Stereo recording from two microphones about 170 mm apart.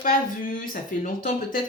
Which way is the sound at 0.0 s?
55° left (ahead or behind).